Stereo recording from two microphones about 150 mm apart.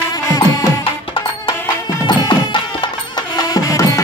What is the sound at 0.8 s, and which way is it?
Music, 35° left (ahead or behind).